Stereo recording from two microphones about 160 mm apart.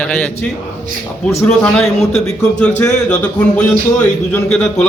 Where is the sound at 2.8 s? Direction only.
20° left (ahead or behind).